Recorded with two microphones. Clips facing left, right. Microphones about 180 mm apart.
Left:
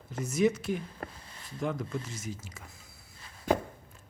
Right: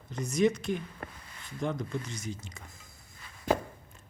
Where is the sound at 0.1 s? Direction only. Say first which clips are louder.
Even; 5° left (ahead or behind).